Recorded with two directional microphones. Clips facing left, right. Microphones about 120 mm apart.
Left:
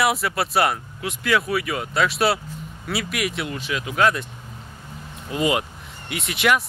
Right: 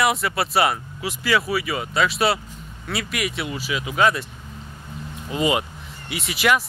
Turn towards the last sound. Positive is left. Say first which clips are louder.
# even
turn(degrees=0)  # may be behind; listen again after turning